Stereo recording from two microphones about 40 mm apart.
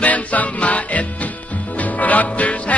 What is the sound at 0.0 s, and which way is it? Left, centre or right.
Music, left.